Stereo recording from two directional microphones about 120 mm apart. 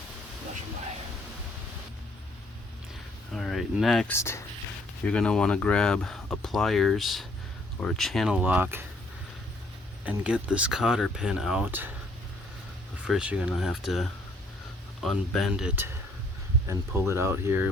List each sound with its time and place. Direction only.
3.3 s speech: centre (ahead or behind)
4.1 s speech: 25° left (ahead or behind)
5.0 s speech: 5° left (ahead or behind)
8.4 s speech: 15° right (ahead or behind)
10.0 s speech: 10° right (ahead or behind)
13.1 s speech: 10° right (ahead or behind)
16.6 s speech: 20° right (ahead or behind)